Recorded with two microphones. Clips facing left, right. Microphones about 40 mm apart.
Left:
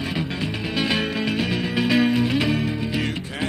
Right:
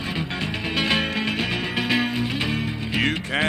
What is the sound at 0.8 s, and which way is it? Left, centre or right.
Music, centre.